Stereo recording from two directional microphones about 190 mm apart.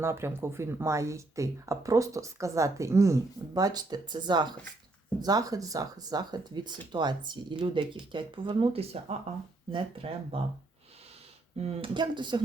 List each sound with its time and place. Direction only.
0.0 s speech: 15° right (ahead or behind); by 10.4 s 30° right (ahead or behind)
11.5 s speech: 30° right (ahead or behind)